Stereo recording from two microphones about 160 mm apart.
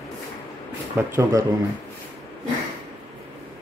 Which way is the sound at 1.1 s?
20° right (ahead or behind).